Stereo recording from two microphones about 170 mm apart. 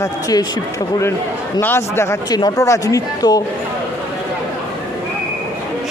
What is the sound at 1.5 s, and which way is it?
Speech, 15° left (ahead or behind).